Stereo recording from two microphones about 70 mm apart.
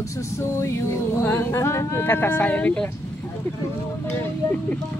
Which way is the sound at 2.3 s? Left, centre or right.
Centre.